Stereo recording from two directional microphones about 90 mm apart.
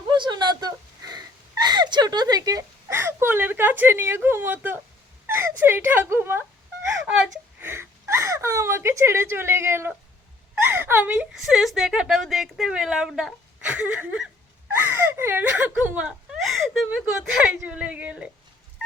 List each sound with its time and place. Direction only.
0.1 s a sound: 55° right (ahead or behind)
2.9 s speech: 30° right (ahead or behind)
7.6 s a woman's voice: 25° right (ahead or behind)
11.3 s a woman's voice: 5° right (ahead or behind)
16.4 s a sound: centre (ahead or behind)
16.8 s speech: 15° right (ahead or behind)